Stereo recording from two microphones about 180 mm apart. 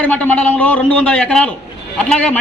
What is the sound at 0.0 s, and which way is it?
A man's voice, 10° left (ahead or behind).